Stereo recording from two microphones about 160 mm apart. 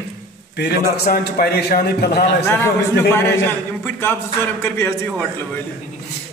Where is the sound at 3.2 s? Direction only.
15° left (ahead or behind).